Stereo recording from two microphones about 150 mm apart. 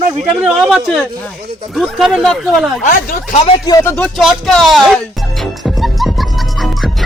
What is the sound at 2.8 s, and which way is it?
Speech, 65° left (ahead or behind).